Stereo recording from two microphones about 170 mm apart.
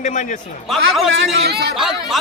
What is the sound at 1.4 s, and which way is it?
Speech, 70° right (ahead or behind).